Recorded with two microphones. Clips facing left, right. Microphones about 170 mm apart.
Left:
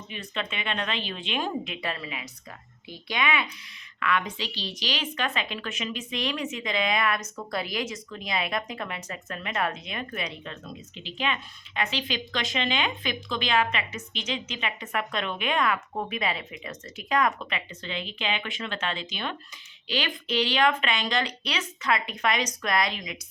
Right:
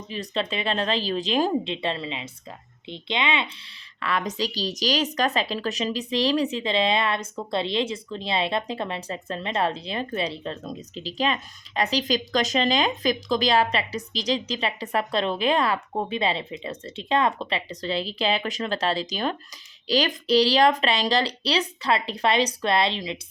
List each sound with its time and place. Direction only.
0.1 s a woman's voice: 35° right (ahead or behind)
4.0 s a woman's voice: 40° right (ahead or behind)